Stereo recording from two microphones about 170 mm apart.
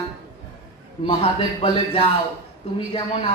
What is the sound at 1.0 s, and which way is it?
Speech, 35° left (ahead or behind).